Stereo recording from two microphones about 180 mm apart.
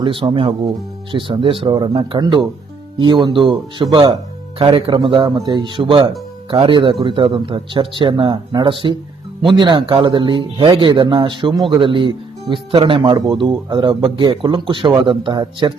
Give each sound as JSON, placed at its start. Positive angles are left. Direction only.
{"t": 0.0, "sound": "speech", "side_deg": -30}